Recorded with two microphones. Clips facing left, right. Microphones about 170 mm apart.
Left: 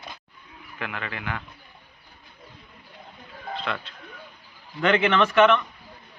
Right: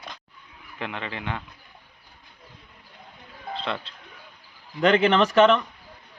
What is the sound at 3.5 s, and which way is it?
A man's voice, 30° right (ahead or behind).